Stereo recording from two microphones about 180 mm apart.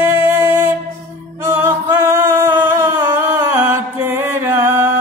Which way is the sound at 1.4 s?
10° right (ahead or behind).